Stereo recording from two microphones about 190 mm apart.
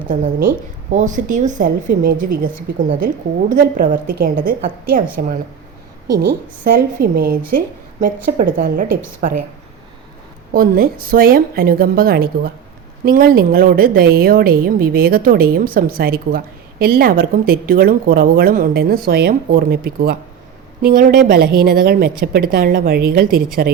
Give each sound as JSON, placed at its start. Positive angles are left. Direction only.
{"t": 0.1, "sound": "a woman's voice", "side_deg": -45}
{"t": 3.5, "sound": "a woman's voice", "side_deg": -45}
{"t": 6.2, "sound": "a woman's voice", "side_deg": -50}
{"t": 10.5, "sound": "a woman's voice", "side_deg": -50}